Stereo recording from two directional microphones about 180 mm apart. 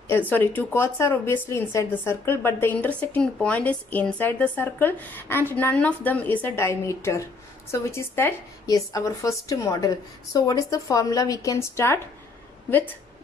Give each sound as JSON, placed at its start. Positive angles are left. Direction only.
{"t": 0.3, "sound": "a woman's voice", "side_deg": 10}